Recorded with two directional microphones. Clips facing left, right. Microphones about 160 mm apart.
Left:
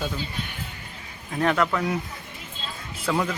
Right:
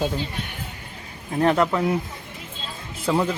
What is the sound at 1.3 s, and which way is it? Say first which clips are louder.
Speech: right 3 dB; 30° right (ahead or behind).